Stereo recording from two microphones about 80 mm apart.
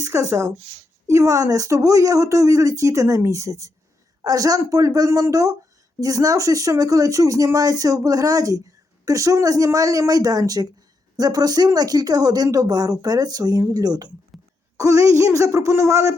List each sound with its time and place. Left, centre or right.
0.0 s speech: right
14.8 s speech: right